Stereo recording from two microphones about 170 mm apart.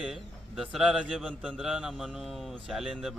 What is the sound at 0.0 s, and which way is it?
Speech, centre (ahead or behind).